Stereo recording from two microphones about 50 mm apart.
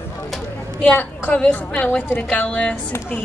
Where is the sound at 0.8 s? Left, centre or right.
Left.